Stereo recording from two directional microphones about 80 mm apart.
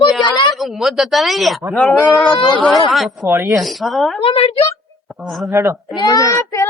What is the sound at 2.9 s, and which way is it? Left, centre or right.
Speech, centre.